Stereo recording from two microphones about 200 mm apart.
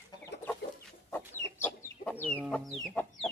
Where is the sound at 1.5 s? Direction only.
10° left (ahead or behind).